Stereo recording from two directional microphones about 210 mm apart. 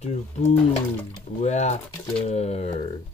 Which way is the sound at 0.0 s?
30° left (ahead or behind).